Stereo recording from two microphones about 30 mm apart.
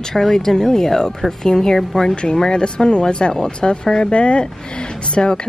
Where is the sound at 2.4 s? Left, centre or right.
Left.